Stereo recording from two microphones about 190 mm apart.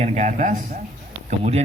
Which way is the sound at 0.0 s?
35° right (ahead or behind).